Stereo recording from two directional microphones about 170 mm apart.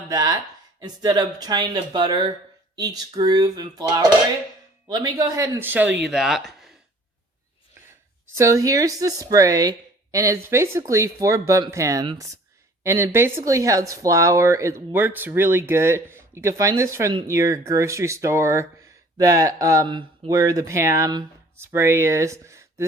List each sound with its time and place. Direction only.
0.1 s speech: 25° right (ahead or behind); by 6.7 s centre (ahead or behind)
8.4 s speech: 20° right (ahead or behind)